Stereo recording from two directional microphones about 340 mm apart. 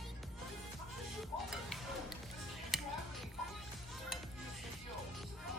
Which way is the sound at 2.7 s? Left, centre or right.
Centre.